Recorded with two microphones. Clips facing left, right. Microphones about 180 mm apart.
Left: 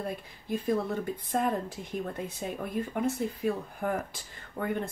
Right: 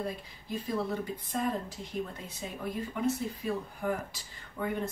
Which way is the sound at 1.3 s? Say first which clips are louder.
Left 3 dB; 55° left (ahead or behind).